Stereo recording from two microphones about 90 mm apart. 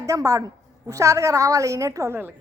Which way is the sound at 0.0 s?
40° right (ahead or behind).